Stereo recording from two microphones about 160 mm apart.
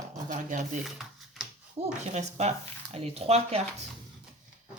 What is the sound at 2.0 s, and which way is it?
Speech, 45° right (ahead or behind).